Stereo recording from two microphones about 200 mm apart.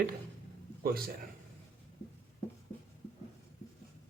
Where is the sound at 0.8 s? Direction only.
50° right (ahead or behind).